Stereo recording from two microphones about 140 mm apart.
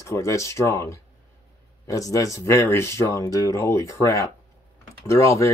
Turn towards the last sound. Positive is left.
turn(degrees=20)  # may be behind; listen again after turning